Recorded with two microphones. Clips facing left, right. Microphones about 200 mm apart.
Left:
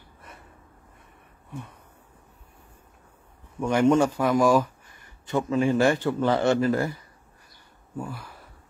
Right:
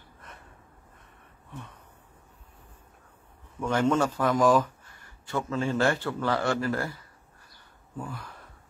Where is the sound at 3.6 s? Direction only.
15° left (ahead or behind).